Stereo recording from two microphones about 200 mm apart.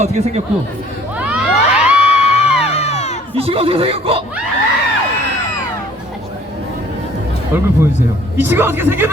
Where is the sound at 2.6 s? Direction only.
30° left (ahead or behind).